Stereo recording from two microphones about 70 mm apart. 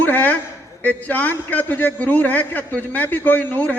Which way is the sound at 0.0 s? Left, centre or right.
Left.